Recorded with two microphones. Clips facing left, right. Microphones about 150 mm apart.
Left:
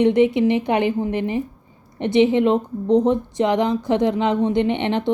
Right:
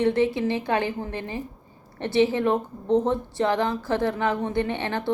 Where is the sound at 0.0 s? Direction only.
15° left (ahead or behind).